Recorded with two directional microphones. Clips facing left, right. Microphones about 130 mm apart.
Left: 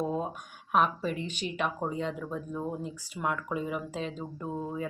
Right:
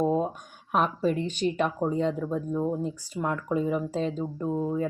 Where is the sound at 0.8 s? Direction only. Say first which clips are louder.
Right 3 dB; 45° right (ahead or behind).